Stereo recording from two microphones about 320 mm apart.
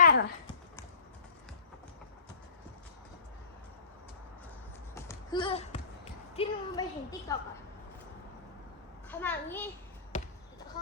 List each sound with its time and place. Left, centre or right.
0.0 s clip-clop: left
4.9 s a sound: centre
6.3 s a woman's voice: centre
9.0 s a child's voice: centre
10.1 s basketball bounce: left